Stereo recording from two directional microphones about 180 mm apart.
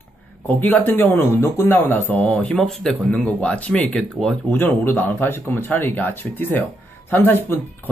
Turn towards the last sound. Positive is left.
turn(degrees=10)  # may be behind; listen again after turning